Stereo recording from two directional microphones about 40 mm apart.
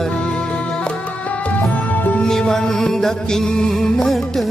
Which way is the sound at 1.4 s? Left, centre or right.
Left.